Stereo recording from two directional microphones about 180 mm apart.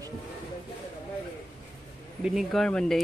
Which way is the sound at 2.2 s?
Centre (ahead or behind).